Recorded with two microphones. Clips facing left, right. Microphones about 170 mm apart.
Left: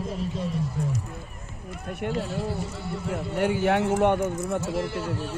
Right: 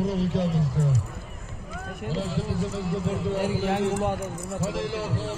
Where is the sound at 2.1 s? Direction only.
90° right.